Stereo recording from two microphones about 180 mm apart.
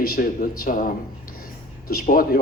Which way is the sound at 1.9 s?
55° left (ahead or behind).